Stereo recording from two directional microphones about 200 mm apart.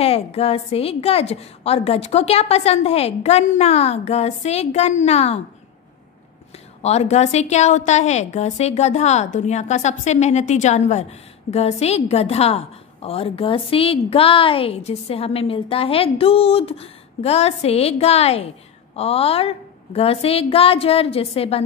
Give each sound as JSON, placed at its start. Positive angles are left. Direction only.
{"t": 0.0, "sound": "a woman's voice", "side_deg": 30}
{"t": 6.8, "sound": "a woman's voice", "side_deg": 35}